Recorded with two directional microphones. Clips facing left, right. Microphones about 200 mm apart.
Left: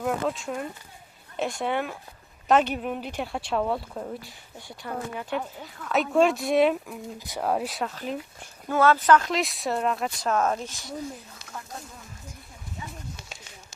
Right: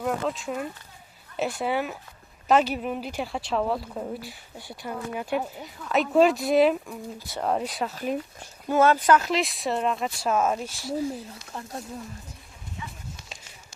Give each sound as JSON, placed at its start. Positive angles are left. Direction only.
{"t": 0.0, "sound": "speech", "side_deg": 0}
{"t": 7.2, "sound": "speech", "side_deg": 15}
{"t": 7.4, "sound": "speech", "side_deg": 5}
{"t": 8.7, "sound": "speech", "side_deg": -15}